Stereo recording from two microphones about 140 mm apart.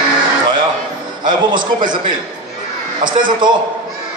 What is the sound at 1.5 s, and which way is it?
Speech, 80° right.